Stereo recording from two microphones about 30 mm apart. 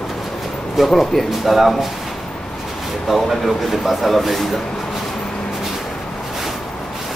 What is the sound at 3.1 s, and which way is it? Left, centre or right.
Speech, centre.